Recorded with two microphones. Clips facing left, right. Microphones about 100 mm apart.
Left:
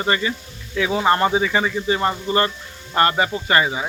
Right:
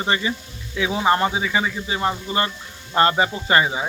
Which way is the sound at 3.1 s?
20° right (ahead or behind).